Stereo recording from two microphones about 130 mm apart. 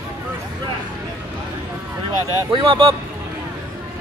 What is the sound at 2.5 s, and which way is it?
Speech, 40° right (ahead or behind).